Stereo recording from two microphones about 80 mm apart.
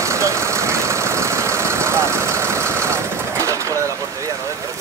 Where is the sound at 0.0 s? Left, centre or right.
Right.